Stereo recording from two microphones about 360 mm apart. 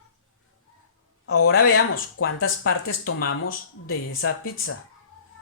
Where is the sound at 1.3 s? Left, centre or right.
Left.